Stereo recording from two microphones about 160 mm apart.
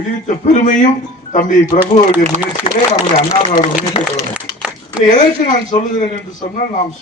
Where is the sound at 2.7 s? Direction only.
35° left (ahead or behind).